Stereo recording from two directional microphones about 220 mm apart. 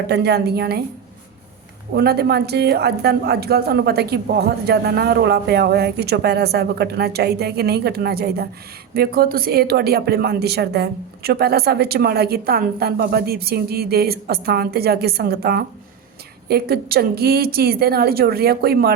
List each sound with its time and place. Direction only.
0.1 s a woman's voice: 50° right (ahead or behind)
2.0 s a woman's voice: 45° right (ahead or behind)